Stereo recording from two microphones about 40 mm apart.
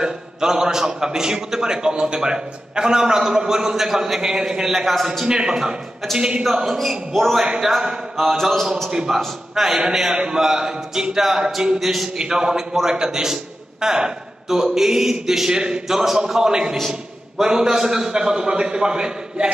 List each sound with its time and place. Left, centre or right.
0.0 s a man's voice: centre
4.8 s a man's voice: centre
5.2 s a man's voice: centre
7.4 s a man's voice: centre
8.2 s a man's voice: centre
8.9 s a man's voice: centre
12.2 s a man's voice: centre